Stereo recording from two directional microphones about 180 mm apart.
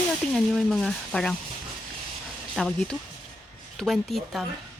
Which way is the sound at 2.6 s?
5° left (ahead or behind).